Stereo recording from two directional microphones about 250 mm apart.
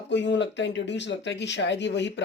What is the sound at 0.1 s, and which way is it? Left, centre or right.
Speech, left.